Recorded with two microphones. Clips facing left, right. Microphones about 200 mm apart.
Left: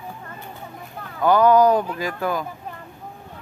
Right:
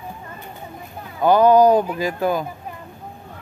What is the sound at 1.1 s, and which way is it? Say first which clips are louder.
Speech: right 2 dB; 25° right (ahead or behind).